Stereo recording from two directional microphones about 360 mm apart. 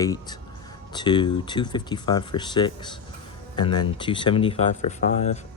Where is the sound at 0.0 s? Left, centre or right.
Centre.